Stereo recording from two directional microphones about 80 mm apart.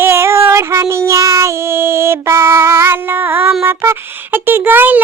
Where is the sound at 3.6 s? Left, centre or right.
Right.